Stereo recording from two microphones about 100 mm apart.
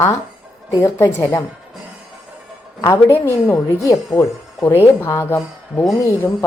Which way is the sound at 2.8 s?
30° left (ahead or behind).